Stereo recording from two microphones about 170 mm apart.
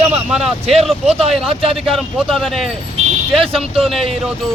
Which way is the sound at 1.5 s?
35° right (ahead or behind).